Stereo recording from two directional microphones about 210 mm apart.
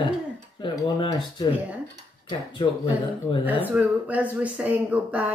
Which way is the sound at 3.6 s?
5° right (ahead or behind).